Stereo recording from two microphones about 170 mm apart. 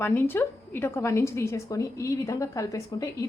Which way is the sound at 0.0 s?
10° left (ahead or behind).